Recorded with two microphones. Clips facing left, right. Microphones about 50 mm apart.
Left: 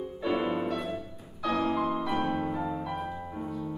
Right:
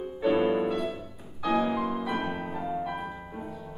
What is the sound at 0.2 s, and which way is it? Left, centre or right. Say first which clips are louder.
Music: right 5 dB; centre.